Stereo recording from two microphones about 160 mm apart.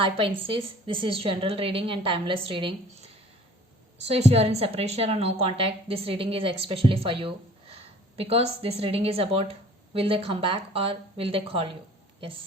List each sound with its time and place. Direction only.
0.0 s a woman's voice: 35° right (ahead or behind)